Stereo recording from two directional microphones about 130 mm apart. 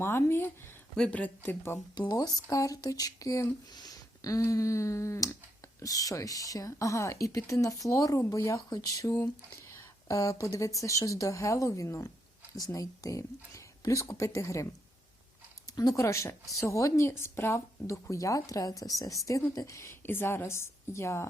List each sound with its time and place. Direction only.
0.0 s speech: 20° left (ahead or behind)
2.0 s a woman's voice: 30° left (ahead or behind)
9.7 s a sound: 25° left (ahead or behind)
10.8 s a woman's voice: 25° left (ahead or behind)
15.7 s a woman's voice: 30° left (ahead or behind)